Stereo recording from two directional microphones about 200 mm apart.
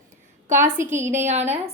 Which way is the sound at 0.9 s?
10° right (ahead or behind).